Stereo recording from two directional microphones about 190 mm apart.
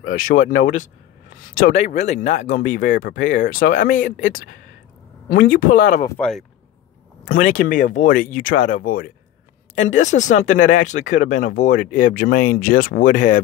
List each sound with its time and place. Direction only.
0.0 s speech: 45° left (ahead or behind)
5.3 s speech: 50° left (ahead or behind)
6.1 s speech: 5° left (ahead or behind)
7.2 s speech: 45° left (ahead or behind)